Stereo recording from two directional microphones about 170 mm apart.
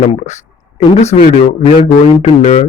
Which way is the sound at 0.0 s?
40° left (ahead or behind).